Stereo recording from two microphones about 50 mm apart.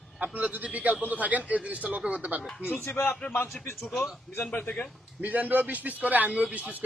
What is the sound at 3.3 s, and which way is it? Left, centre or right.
A man's voice, left.